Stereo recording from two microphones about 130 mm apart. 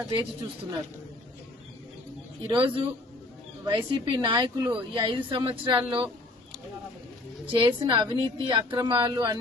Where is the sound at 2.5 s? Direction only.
40° right (ahead or behind).